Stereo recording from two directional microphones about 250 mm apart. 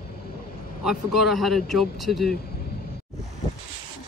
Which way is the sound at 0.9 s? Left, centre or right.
Centre.